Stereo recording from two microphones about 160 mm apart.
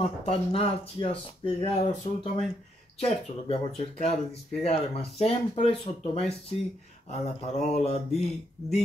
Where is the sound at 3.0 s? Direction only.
40° left (ahead or behind).